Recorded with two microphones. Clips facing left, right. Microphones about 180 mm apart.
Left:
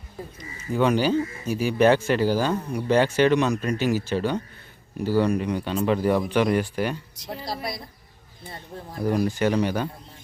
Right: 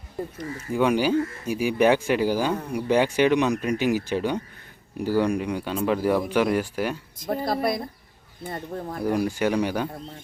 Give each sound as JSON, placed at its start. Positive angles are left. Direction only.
{"t": 0.3, "sound": "speech", "side_deg": -60}
{"t": 0.7, "sound": "speech", "side_deg": -10}
{"t": 7.2, "sound": "a woman's voice", "side_deg": -50}
{"t": 9.0, "sound": "speech", "side_deg": -10}